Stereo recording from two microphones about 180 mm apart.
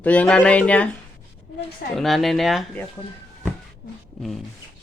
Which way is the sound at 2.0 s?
Centre (ahead or behind).